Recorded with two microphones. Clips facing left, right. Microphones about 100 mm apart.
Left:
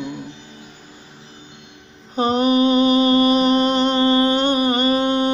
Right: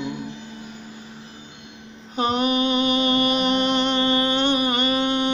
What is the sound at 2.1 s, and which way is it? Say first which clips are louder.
Mantra: left 5 dB; 35° left (ahead or behind).